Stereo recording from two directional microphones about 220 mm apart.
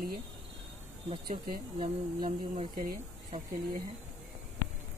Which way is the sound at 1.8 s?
20° right (ahead or behind).